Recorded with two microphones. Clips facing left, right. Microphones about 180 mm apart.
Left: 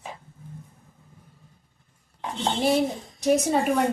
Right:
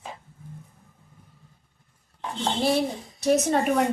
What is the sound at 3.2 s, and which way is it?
Speech, 10° left (ahead or behind).